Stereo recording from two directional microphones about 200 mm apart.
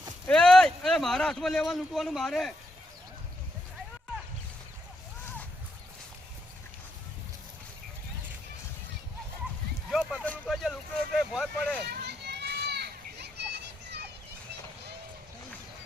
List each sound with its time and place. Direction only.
0.3 s speech: 5° left (ahead or behind)
9.9 s a sound: centre (ahead or behind)
10.2 s vehicle: 5° left (ahead or behind)
11.9 s children playing: 55° right (ahead or behind)